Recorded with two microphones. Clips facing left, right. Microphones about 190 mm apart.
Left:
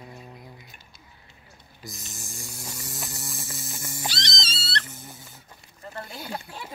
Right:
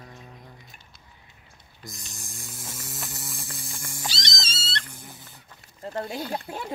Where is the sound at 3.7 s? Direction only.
5° left (ahead or behind).